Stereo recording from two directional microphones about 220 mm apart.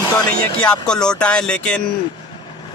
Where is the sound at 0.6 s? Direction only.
5° left (ahead or behind).